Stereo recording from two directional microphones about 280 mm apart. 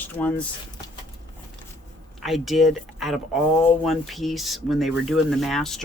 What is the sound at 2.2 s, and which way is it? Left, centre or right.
Speech, centre.